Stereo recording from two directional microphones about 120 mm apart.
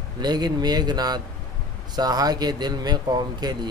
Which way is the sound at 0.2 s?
35° right (ahead or behind).